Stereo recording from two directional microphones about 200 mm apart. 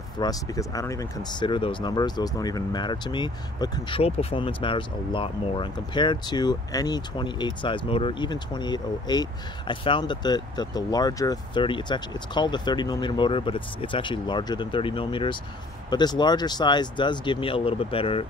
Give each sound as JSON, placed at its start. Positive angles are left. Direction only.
{"t": 0.2, "sound": "speech", "side_deg": 20}